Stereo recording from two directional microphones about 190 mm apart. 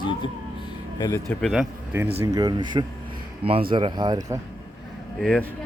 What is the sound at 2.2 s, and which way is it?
Speech, 20° right (ahead or behind).